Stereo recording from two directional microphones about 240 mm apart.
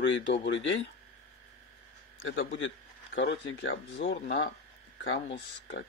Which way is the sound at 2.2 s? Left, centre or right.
Left.